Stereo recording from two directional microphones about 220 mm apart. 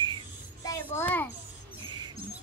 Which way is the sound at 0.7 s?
10° left (ahead or behind).